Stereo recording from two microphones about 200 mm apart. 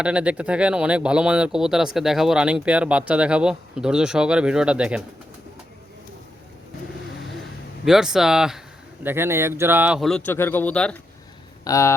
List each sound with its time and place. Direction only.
0.0 s speech: 5° right (ahead or behind)
7.9 s speech: centre (ahead or behind)
10.0 s a man's voice: 5° left (ahead or behind)